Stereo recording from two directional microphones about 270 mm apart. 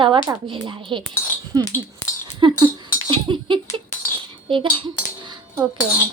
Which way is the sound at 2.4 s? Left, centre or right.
Centre.